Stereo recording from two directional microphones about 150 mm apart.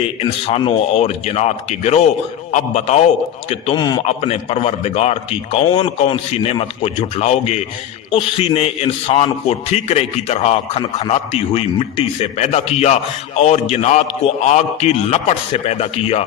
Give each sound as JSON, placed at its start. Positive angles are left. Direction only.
{"t": 0.2, "sound": "a man's voice", "side_deg": 40}
{"t": 3.8, "sound": "a man's voice", "side_deg": 25}
{"t": 4.0, "sound": "a man's voice", "side_deg": 45}